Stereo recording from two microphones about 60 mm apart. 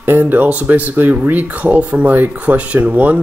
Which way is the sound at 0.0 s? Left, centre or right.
Right.